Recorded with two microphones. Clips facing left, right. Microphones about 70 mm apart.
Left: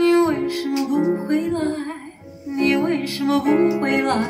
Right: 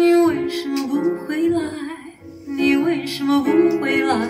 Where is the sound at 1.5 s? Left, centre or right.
Left.